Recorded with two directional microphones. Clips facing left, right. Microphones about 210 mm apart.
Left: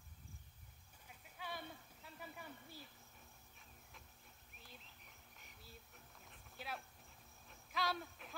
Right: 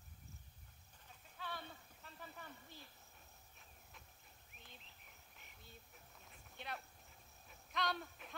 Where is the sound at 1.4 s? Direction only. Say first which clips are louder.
Even; 10° left (ahead or behind).